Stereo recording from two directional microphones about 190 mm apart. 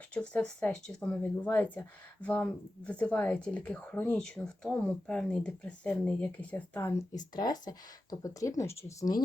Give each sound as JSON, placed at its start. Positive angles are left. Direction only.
{"t": 0.1, "sound": "speech", "side_deg": 5}
{"t": 7.3, "sound": "speech", "side_deg": 20}